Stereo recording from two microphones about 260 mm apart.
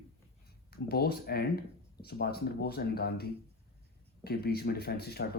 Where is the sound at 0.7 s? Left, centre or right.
Left.